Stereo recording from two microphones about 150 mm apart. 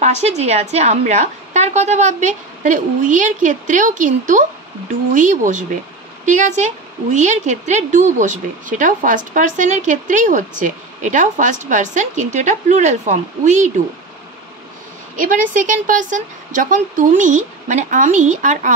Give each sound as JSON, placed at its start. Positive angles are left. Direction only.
{"t": 0.0, "sound": "a woman's voice", "side_deg": -50}
{"t": 15.1, "sound": "a woman's voice", "side_deg": -65}